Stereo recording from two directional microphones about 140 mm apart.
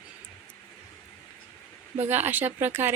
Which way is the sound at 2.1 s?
15° right (ahead or behind).